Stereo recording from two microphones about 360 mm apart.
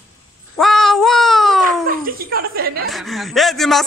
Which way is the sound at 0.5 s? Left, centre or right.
Centre.